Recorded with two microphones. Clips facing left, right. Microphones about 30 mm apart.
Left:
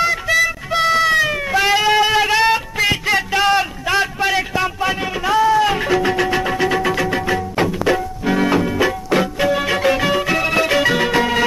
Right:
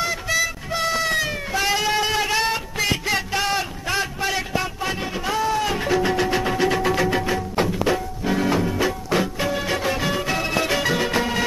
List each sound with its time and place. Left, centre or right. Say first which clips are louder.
0.0 s music: left 7 dB; left
1.2 s cat: left 7 dB; left
3.3 s a sound: left 9 dB; left
3.9 s music: left 6 dB; left
5.8 s music: left 4 dB; left
10.4 s music: left 6 dB; left
10.7 s music: left 5 dB; left